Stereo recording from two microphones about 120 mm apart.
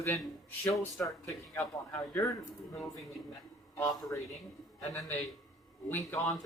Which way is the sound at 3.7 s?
25° left (ahead or behind).